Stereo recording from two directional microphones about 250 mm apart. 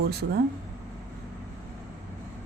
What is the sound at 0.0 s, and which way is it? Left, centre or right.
Speech, right.